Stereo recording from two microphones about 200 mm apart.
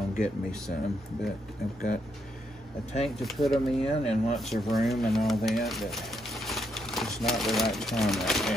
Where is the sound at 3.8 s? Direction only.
30° left (ahead or behind).